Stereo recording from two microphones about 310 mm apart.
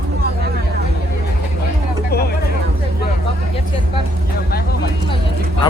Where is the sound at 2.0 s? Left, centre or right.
Left.